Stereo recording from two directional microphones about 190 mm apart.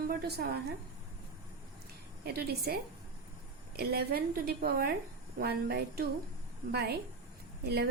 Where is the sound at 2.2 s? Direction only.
55° right (ahead or behind).